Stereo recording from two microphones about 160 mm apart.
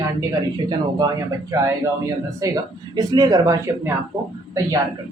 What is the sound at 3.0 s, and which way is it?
Speech, 25° right (ahead or behind).